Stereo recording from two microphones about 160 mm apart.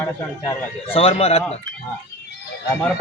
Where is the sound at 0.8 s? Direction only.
35° left (ahead or behind).